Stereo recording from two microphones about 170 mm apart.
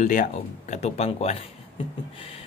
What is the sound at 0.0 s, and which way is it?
Speech, 50° left (ahead or behind).